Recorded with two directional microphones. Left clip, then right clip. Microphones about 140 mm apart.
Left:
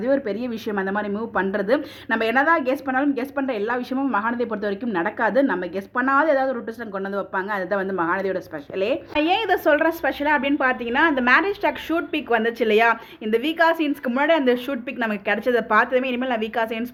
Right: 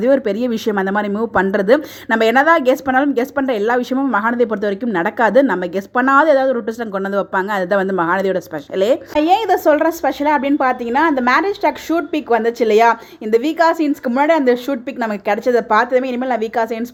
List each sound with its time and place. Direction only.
0.0 s speech: 55° right (ahead or behind)
9.1 s a woman's voice: 30° right (ahead or behind)